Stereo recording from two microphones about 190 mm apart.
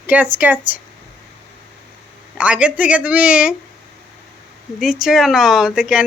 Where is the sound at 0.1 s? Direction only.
10° right (ahead or behind).